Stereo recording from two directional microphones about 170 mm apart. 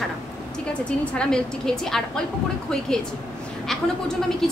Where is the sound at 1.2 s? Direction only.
5° left (ahead or behind).